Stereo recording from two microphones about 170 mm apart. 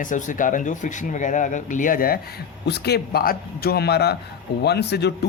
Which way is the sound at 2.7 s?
75° left (ahead or behind).